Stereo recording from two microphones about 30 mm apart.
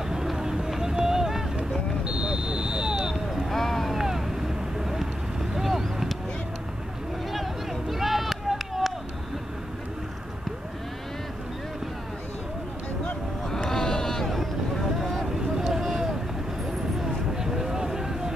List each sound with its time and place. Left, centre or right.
0.1 s a sound: centre
0.9 s boat: centre
2.0 s vehicle: right
3.4 s boat: centre
4.0 s vehicle: centre
5.6 s a sound: centre
7.9 s run: centre
13.7 s boat: centre
15.8 s vehicle: centre
17.4 s a sound: centre